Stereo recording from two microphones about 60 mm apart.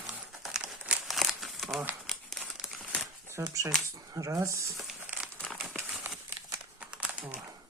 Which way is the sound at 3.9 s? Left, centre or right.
Right.